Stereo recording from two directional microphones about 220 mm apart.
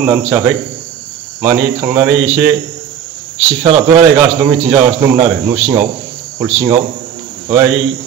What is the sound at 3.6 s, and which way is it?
Speech, 25° right (ahead or behind).